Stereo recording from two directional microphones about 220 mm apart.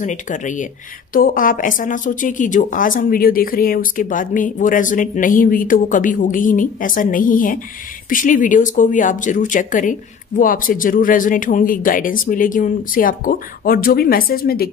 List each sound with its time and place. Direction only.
0.0 s speech: 35° left (ahead or behind)